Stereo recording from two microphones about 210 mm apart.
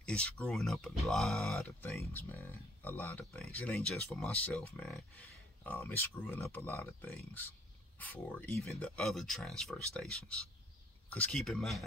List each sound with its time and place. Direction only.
0.0 s speech: 5° left (ahead or behind)